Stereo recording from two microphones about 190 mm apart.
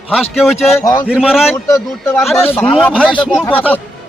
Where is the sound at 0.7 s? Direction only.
20° left (ahead or behind).